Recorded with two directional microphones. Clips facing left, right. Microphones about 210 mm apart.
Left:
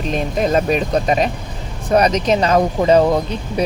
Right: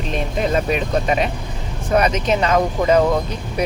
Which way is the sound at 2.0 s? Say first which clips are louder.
Left 3 dB; 40° left (ahead or behind).